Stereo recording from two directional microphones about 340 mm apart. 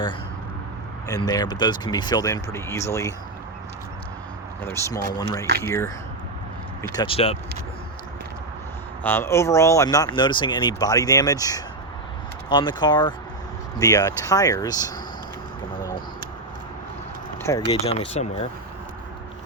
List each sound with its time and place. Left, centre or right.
1.0 s speech: centre
4.6 s speech: centre
9.0 s speech: centre
17.7 s speech: centre